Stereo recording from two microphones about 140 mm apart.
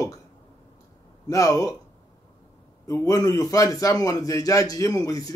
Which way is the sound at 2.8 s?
25° left (ahead or behind).